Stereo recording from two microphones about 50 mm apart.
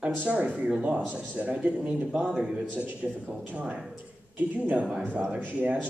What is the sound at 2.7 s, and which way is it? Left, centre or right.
Speech, right.